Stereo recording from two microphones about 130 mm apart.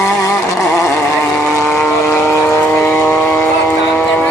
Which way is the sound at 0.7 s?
20° left (ahead or behind).